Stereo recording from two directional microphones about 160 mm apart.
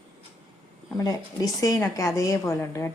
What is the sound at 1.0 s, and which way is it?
Speech, 20° left (ahead or behind).